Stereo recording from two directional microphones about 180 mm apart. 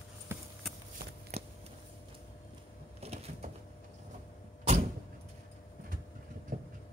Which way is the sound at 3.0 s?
35° right (ahead or behind).